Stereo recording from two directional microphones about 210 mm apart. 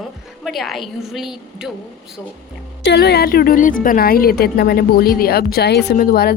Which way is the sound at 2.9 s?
50° left (ahead or behind).